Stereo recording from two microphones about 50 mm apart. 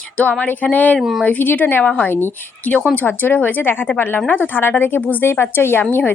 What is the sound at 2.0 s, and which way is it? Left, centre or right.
A woman's voice, left.